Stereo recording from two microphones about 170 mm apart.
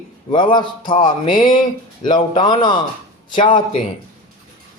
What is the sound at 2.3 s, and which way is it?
Speech, 25° left (ahead or behind).